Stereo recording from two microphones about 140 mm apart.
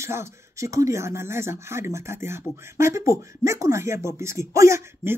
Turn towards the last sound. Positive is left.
turn(degrees=-20)  # may be behind; listen again after turning